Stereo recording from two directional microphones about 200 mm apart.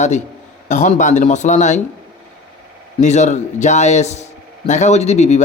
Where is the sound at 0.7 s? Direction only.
40° left (ahead or behind).